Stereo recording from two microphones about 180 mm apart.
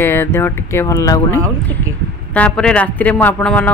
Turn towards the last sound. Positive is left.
turn(degrees=10)  # may be behind; listen again after turning